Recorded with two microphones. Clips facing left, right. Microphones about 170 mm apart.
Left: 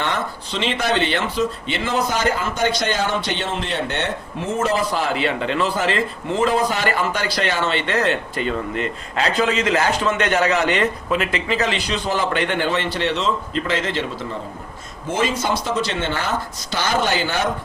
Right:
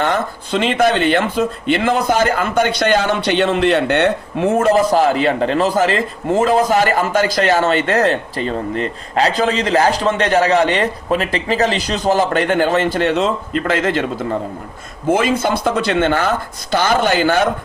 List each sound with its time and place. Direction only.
0.0 s speech: 50° right (ahead or behind)